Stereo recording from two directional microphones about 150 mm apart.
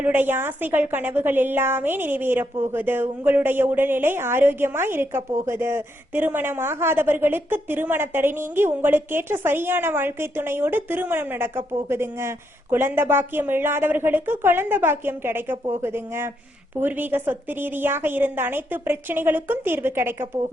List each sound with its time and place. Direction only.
0.0 s a woman's voice: 15° right (ahead or behind)